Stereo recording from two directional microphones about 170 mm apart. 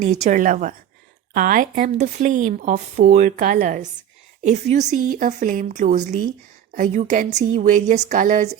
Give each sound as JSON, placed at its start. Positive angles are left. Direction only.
{"t": 0.0, "sound": "speech", "side_deg": -45}